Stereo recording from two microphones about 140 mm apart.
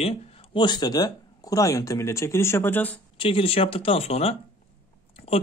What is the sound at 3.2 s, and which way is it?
Speech, 40° left (ahead or behind).